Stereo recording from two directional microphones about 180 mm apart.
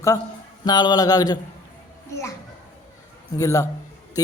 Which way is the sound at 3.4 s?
20° left (ahead or behind).